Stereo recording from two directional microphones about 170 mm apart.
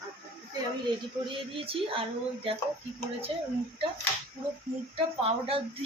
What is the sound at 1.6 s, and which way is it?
Speech, 30° right (ahead or behind).